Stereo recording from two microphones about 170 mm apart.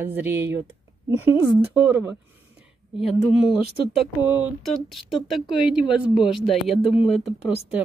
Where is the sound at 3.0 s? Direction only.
35° left (ahead or behind).